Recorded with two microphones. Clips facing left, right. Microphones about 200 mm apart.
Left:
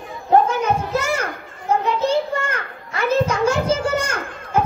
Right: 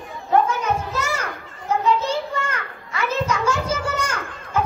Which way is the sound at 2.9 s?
55° left (ahead or behind).